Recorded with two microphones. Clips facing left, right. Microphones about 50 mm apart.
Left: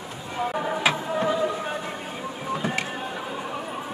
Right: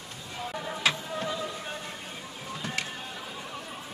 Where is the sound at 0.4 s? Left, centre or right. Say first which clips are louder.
Left 6 dB; left.